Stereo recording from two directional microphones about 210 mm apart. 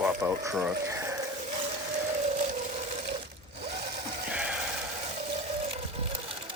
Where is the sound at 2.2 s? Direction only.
35° right (ahead or behind).